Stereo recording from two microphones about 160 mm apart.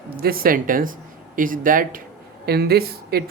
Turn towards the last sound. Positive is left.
turn(degrees=-80)